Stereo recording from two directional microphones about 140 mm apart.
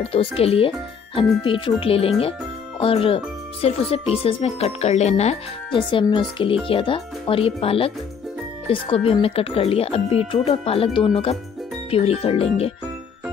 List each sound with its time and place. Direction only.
0.0 s speech: 45° left (ahead or behind)
5.8 s speech: 35° left (ahead or behind)